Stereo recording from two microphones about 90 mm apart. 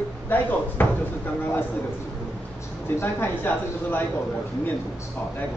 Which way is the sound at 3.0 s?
25° left (ahead or behind).